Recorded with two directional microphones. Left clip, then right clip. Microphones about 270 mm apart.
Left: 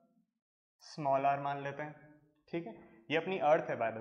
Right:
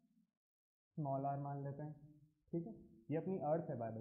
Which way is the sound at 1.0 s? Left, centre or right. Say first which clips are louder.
Left 11 dB; centre.